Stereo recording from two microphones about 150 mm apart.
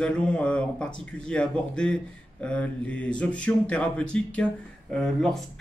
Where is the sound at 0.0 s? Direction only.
5° left (ahead or behind).